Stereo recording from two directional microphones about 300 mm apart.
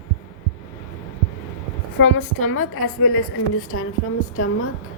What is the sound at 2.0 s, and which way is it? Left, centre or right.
A woman's voice, left.